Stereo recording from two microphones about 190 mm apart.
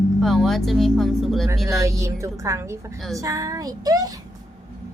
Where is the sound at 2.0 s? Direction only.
15° right (ahead or behind).